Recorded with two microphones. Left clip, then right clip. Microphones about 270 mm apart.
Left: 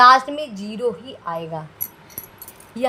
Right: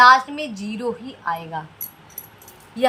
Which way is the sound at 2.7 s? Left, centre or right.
Left.